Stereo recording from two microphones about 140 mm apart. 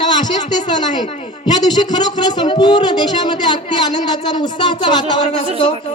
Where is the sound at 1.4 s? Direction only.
30° left (ahead or behind).